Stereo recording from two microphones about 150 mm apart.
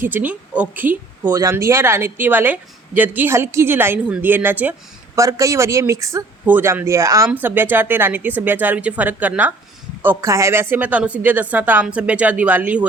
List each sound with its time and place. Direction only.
0.0 s speech: 10° right (ahead or behind)
1.3 s speech: 20° right (ahead or behind)